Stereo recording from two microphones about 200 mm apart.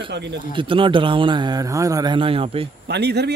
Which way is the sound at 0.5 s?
25° right (ahead or behind).